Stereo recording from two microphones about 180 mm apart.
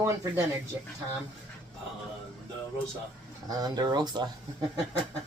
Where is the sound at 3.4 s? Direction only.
20° right (ahead or behind).